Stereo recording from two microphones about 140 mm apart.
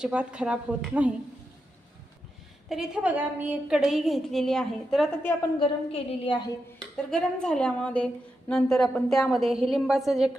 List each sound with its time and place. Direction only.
0.0 s a woman's voice: 10° right (ahead or behind)
2.6 s a woman's voice: 5° right (ahead or behind)
5.5 s speech: 40° left (ahead or behind)
6.9 s a woman's voice: 5° left (ahead or behind)